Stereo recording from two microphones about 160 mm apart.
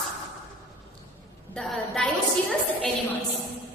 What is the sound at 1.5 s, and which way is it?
Speech, 5° left (ahead or behind).